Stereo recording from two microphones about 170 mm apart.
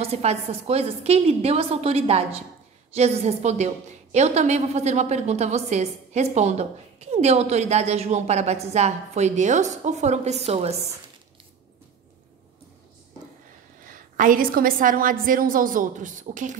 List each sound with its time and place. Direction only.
0.0 s a woman's voice: 40° right (ahead or behind)
13.8 s a woman's voice: 50° right (ahead or behind)